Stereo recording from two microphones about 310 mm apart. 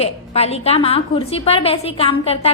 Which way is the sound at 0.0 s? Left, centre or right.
Centre.